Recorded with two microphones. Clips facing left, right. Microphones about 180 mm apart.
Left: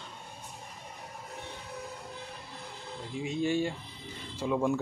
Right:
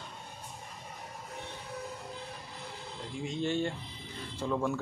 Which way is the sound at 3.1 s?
5° left (ahead or behind).